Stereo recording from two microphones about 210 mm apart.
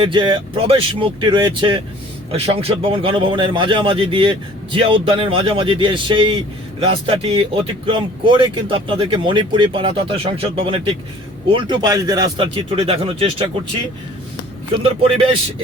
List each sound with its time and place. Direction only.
0.0 s a man's voice: 25° right (ahead or behind)